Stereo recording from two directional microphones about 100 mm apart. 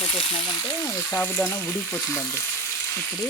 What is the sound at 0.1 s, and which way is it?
Sizzle, 60° left (ahead or behind).